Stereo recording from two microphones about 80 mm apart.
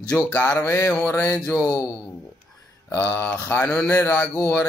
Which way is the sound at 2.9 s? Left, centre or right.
Left.